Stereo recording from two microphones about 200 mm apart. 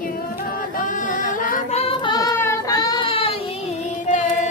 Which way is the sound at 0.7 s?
40° left (ahead or behind).